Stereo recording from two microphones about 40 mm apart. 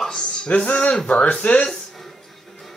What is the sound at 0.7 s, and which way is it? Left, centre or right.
A man's voice, left.